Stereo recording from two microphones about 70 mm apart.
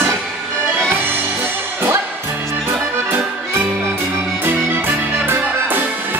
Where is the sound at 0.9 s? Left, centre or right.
Right.